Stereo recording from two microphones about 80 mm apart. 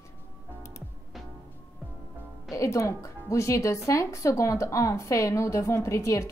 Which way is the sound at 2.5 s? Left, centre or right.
Left.